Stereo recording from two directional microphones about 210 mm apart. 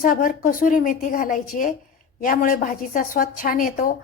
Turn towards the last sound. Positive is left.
turn(degrees=40)  # may be behind; listen again after turning